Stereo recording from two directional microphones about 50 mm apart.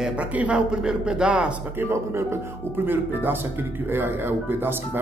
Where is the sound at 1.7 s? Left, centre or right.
Right.